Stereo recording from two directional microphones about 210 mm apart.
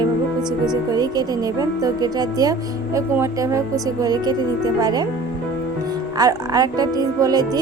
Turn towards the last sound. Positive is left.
turn(degrees=-20)  # may be behind; listen again after turning